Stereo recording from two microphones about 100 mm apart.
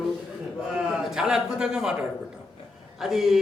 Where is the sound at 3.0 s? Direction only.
Centre (ahead or behind).